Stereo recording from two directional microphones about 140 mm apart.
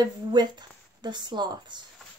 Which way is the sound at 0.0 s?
30° right (ahead or behind).